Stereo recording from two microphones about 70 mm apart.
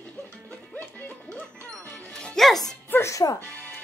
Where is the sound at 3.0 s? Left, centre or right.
Left.